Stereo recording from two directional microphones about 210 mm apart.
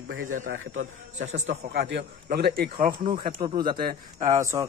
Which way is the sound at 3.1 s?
25° right (ahead or behind).